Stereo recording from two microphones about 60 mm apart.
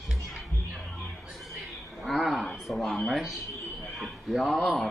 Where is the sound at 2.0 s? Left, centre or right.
Centre.